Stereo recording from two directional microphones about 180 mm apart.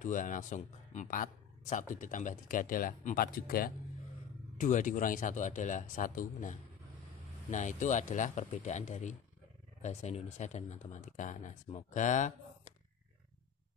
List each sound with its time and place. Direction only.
0.0 s speech: 45° left (ahead or behind)
7.5 s speech: 45° left (ahead or behind)